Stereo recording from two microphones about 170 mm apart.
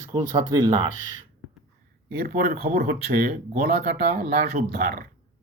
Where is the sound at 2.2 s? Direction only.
60° right (ahead or behind).